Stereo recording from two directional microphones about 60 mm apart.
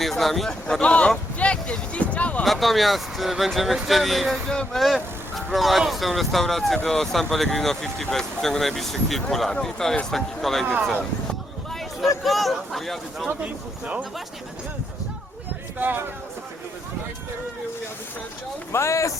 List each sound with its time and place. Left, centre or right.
0.0 s speech: centre
0.9 s speech: left
1.4 s a sound: centre
2.4 s speech: centre
11.7 s speech: centre
13.2 s speech: right
15.8 s speech: right
18.7 s speech: left